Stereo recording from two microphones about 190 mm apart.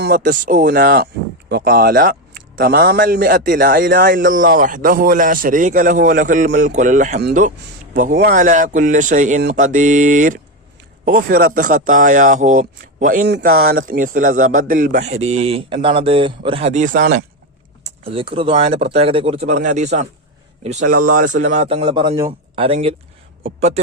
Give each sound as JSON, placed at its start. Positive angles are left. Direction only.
{"t": 0.0, "sound": "a man's voice", "side_deg": -50}
{"t": 13.2, "sound": "a man's voice", "side_deg": -55}
{"t": 17.8, "sound": "a man's voice", "side_deg": -30}
{"t": 21.5, "sound": "a man's voice", "side_deg": -30}